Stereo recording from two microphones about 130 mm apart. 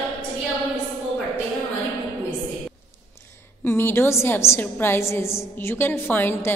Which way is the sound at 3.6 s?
15° left (ahead or behind).